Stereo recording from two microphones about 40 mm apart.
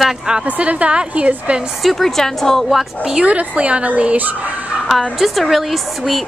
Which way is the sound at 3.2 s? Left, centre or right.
Right.